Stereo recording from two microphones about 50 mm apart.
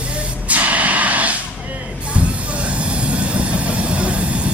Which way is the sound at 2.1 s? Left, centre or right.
Right.